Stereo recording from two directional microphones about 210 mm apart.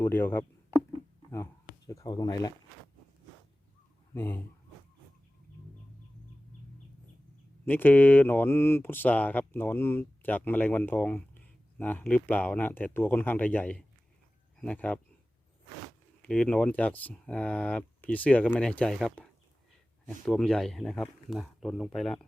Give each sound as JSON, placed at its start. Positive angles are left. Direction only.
{"t": 0.0, "sound": "speech", "side_deg": 10}
{"t": 1.9, "sound": "speech", "side_deg": 15}
{"t": 4.1, "sound": "speech", "side_deg": 10}
{"t": 7.6, "sound": "speech", "side_deg": 10}
{"t": 16.2, "sound": "speech", "side_deg": 5}